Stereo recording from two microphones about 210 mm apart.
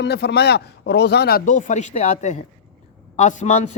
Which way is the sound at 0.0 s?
55° left (ahead or behind).